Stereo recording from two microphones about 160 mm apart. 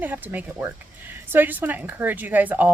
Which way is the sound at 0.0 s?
10° right (ahead or behind).